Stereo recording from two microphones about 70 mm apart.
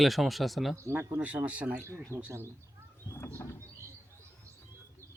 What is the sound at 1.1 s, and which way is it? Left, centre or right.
Speech, right.